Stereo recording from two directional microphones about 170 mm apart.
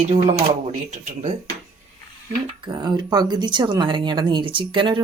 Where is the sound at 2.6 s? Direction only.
25° right (ahead or behind).